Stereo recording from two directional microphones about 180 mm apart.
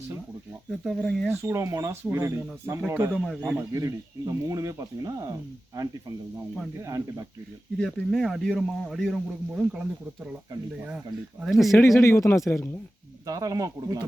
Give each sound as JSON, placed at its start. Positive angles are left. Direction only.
{"t": 0.7, "sound": "speech", "side_deg": 0}
{"t": 1.3, "sound": "speech", "side_deg": -15}
{"t": 3.1, "sound": "speech", "side_deg": 0}
{"t": 3.5, "sound": "speech", "side_deg": -20}
{"t": 7.8, "sound": "speech", "side_deg": 5}
{"t": 10.8, "sound": "speech", "side_deg": -5}
{"t": 11.9, "sound": "speech", "side_deg": 15}
{"t": 12.4, "sound": "speech", "side_deg": 5}
{"t": 13.2, "sound": "speech", "side_deg": -20}